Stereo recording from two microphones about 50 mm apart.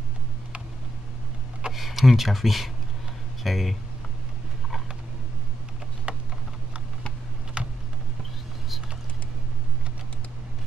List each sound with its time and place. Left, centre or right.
1.7 s speech: centre
6.1 s a sound: right
7.6 s computer keyboard: right